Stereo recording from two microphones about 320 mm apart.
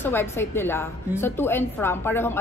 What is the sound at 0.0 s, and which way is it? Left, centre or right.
A woman's voice, centre.